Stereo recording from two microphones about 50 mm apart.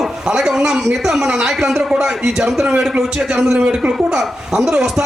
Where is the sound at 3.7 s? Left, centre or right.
Centre.